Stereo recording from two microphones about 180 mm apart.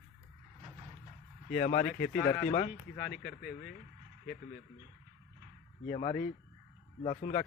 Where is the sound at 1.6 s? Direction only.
35° left (ahead or behind).